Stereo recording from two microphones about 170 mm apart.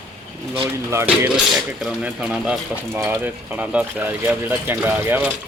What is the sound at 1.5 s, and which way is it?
Speech, 5° right (ahead or behind).